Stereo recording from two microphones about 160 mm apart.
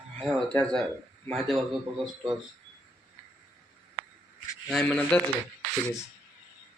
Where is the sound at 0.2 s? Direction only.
5° left (ahead or behind).